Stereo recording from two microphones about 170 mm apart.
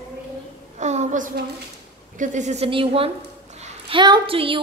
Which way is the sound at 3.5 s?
40° right (ahead or behind).